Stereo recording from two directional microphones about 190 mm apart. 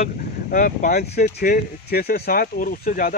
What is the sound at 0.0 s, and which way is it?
Speech, 45° left (ahead or behind).